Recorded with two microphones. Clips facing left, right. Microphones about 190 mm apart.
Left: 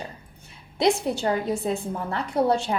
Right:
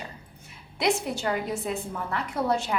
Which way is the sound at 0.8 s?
30° left (ahead or behind).